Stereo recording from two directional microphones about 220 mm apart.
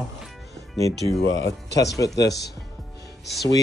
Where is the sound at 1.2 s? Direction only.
50° left (ahead or behind).